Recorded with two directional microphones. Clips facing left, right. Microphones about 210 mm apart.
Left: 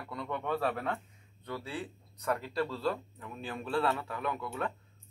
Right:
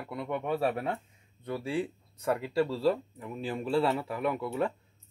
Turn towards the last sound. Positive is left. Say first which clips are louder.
# right 6 dB
turn(degrees=-25)  # may be behind; listen again after turning